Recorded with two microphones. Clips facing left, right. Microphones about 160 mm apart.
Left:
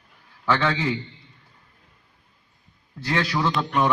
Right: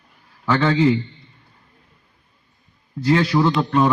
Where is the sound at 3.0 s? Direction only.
20° right (ahead or behind).